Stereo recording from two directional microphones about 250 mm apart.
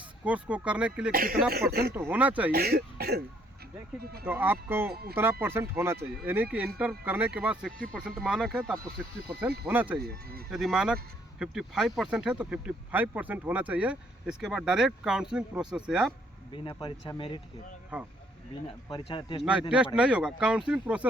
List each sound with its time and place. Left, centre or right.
0.3 s speech: centre
1.1 s speech: right
1.9 s speech: centre
2.5 s speech: right
4.3 s speech: centre
4.9 s speech: right
5.1 s speech: centre
10.0 s speech: right
10.5 s speech: centre
16.6 s speech: centre
17.9 s speech: centre
18.9 s speech: centre
19.4 s speech: centre